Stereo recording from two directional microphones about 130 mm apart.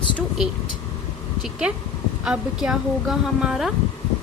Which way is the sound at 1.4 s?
5° right (ahead or behind).